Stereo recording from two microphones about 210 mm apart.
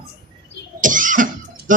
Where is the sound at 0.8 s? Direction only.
40° right (ahead or behind).